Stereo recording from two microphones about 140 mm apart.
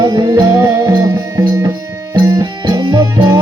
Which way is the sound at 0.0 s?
30° right (ahead or behind).